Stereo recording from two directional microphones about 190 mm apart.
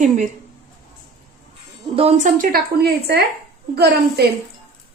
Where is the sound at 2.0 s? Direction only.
35° right (ahead or behind); by 3.2 s 55° right (ahead or behind).